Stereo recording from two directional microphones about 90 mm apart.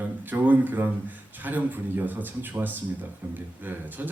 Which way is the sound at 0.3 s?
20° right (ahead or behind).